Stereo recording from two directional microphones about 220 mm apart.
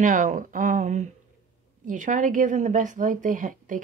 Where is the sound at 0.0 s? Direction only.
35° right (ahead or behind).